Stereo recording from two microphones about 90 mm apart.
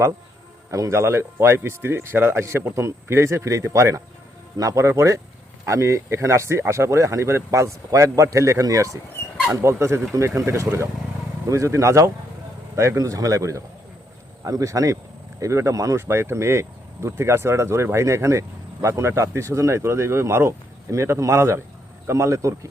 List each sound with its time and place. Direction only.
0.7 s speech: 35° right (ahead or behind)
16.0 s speech: 25° right (ahead or behind)